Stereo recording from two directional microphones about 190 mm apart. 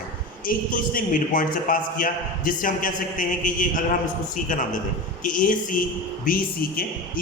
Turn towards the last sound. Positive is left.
turn(degrees=50)  # may be behind; listen again after turning